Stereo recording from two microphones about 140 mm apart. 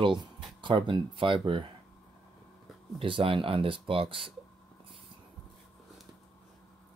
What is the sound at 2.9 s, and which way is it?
Speech, 40° right (ahead or behind).